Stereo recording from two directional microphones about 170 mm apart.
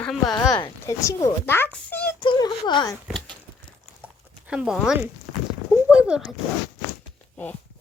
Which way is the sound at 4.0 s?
5° right (ahead or behind).